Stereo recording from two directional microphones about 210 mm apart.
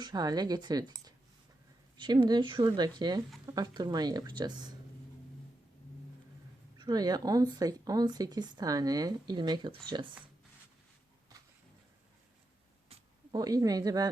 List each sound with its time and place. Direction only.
0.0 s speech: 20° right (ahead or behind)
6.7 s speech: 20° right (ahead or behind)
12.9 s a sound: 30° right (ahead or behind)
13.3 s speech: 15° right (ahead or behind)